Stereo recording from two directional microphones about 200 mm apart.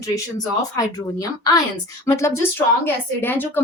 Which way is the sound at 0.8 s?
20° left (ahead or behind).